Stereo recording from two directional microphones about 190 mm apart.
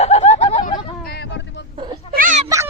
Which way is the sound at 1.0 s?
60° left (ahead or behind).